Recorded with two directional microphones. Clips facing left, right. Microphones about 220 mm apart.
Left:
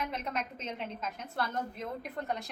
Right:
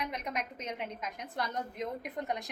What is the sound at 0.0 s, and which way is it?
A woman's voice, 15° right (ahead or behind).